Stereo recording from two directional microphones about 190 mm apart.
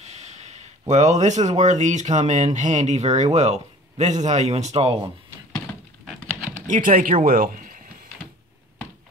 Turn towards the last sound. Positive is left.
turn(degrees=-45)  # may be behind; listen again after turning